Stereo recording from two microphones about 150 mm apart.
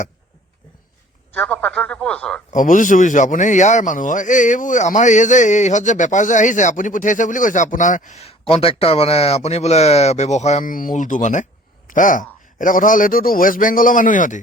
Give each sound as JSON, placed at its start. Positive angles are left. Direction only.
{"t": 1.3, "sound": "speech", "side_deg": 10}
{"t": 2.5, "sound": "a man's voice", "side_deg": 60}